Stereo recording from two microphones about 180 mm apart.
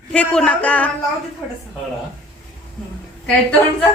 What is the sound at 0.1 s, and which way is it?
Speech, 5° left (ahead or behind).